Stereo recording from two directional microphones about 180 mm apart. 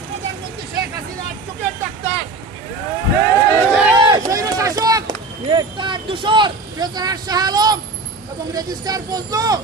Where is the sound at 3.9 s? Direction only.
25° right (ahead or behind).